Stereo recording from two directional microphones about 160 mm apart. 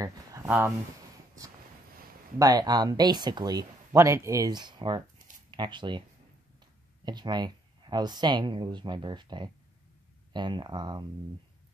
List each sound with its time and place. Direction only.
0.0 s a sound: 20° right (ahead or behind)
0.5 s speech: 10° right (ahead or behind)
2.3 s speech: 25° right (ahead or behind)
7.1 s speech: 25° right (ahead or behind)